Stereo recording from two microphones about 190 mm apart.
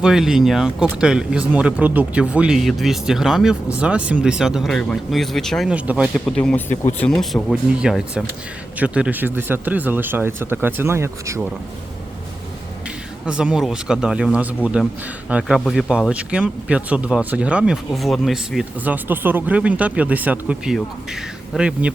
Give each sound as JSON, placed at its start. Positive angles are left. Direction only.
{"t": 0.0, "sound": "speech", "side_deg": 0}
{"t": 6.7, "sound": "speech", "side_deg": 35}
{"t": 7.1, "sound": "speech", "side_deg": 5}
{"t": 13.2, "sound": "speech", "side_deg": -5}